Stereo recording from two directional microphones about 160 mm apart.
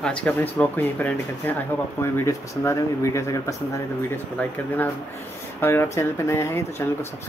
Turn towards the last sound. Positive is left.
turn(degrees=15)  # may be behind; listen again after turning